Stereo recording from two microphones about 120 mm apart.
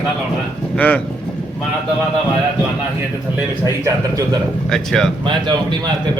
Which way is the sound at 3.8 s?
30° right (ahead or behind).